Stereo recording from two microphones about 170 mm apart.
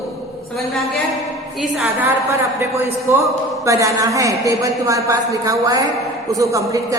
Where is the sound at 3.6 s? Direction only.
20° right (ahead or behind).